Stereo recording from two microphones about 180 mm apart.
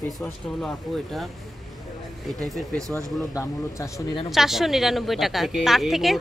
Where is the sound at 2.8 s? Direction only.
20° right (ahead or behind).